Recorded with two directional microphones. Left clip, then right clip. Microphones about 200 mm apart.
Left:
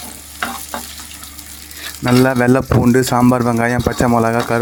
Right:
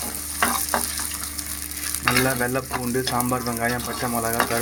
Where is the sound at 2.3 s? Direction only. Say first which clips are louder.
Left 10 dB; 40° left (ahead or behind).